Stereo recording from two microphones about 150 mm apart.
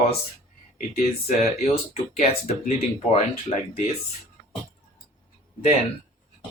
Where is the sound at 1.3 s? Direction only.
45° left (ahead or behind).